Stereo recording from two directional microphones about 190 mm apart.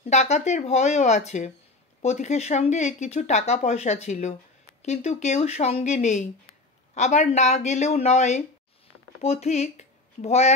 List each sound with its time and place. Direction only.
0.0 s speech: 35° left (ahead or behind)